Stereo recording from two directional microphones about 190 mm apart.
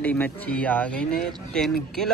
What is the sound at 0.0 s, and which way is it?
Speech, 5° left (ahead or behind).